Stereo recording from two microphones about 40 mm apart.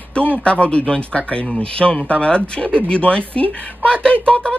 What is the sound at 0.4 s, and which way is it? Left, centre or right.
Speech, left.